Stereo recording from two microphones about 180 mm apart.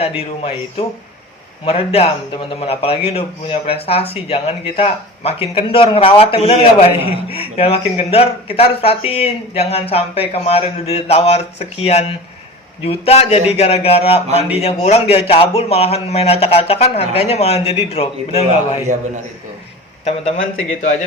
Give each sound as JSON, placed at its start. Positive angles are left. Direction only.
{"t": 0.0, "sound": "a man's voice", "side_deg": 35}
{"t": 20.1, "sound": "a man's voice", "side_deg": 40}